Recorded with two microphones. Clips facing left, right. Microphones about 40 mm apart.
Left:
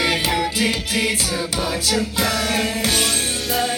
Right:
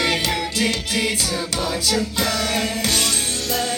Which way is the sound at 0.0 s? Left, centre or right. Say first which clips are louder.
Left 2 dB; centre.